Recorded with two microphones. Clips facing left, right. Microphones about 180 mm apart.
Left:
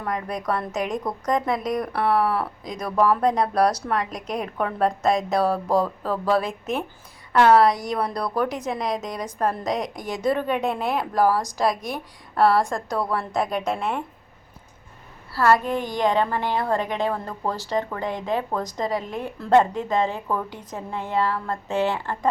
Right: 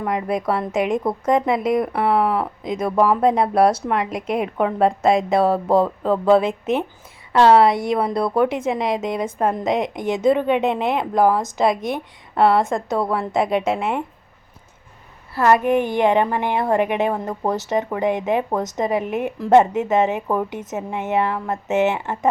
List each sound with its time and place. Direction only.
0.0 s a woman's voice: 20° right (ahead or behind)
15.4 s a woman's voice: 15° right (ahead or behind)